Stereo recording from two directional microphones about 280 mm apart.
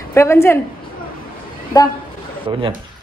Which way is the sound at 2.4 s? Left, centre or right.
Centre.